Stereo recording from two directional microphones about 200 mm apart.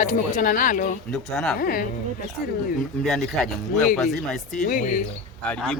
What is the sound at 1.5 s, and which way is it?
Speech, 50° left (ahead or behind).